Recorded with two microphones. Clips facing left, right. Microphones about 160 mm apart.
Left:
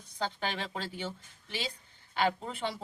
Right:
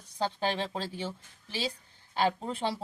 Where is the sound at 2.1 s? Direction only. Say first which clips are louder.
Right 2 dB; 35° right (ahead or behind).